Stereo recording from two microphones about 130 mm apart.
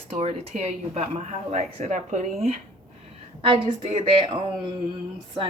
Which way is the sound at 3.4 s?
45° right (ahead or behind).